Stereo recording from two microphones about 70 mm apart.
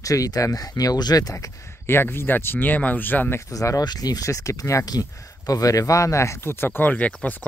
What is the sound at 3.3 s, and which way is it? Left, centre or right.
Speech, left.